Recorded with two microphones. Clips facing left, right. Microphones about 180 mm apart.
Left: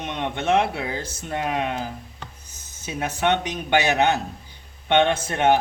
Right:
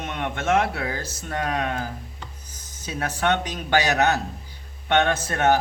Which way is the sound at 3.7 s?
25° left (ahead or behind).